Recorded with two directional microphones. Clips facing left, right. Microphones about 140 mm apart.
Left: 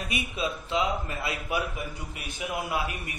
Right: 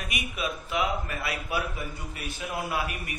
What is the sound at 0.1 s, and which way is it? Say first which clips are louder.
A man's voice: left 2 dB; 25° left (ahead or behind).